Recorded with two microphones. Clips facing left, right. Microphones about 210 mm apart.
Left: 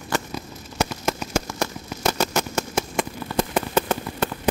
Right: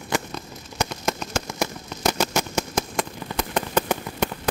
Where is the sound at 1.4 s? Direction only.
10° right (ahead or behind).